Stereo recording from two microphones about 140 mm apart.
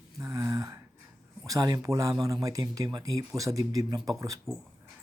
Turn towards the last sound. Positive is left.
turn(degrees=-25)  # may be behind; listen again after turning